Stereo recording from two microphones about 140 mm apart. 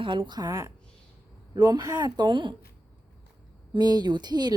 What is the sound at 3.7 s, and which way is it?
Speech, 30° right (ahead or behind).